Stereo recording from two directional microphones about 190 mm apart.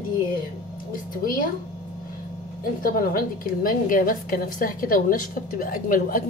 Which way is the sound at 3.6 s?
45° left (ahead or behind).